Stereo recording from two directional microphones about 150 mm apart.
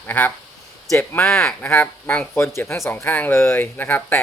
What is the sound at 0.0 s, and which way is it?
Speech, 10° left (ahead or behind).